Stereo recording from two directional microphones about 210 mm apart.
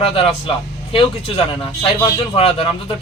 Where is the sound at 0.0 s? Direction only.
25° left (ahead or behind).